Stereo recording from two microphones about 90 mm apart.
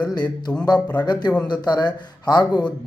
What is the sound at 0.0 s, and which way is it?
Speech, 45° left (ahead or behind).